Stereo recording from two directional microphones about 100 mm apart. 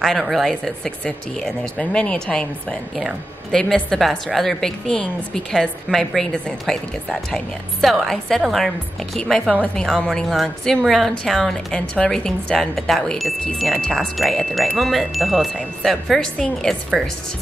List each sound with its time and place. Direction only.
0.0 s a woman's voice: centre (ahead or behind)